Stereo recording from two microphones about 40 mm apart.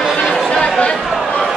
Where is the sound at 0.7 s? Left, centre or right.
Left.